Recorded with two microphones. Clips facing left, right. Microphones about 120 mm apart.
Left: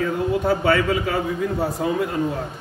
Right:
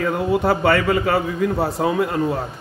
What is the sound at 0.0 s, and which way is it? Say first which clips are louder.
Speech: right 2 dB; 70° right (ahead or behind).